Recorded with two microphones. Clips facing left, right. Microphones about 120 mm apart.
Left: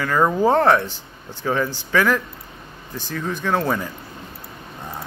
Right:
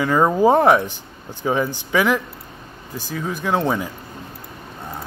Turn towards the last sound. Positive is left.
turn(degrees=-10)  # may be behind; listen again after turning